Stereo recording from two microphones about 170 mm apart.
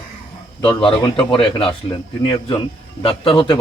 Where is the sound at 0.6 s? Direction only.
30° left (ahead or behind).